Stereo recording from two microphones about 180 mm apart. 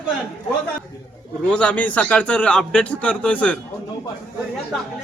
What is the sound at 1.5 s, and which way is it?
A man's voice, 5° left (ahead or behind).